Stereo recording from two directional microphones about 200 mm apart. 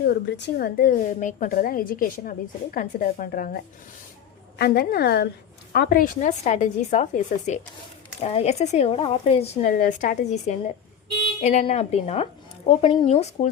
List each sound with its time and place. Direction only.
0.0 s a woman's voice: 55° left (ahead or behind); by 9.7 s 30° left (ahead or behind)
9.7 s a woman's voice: 40° left (ahead or behind)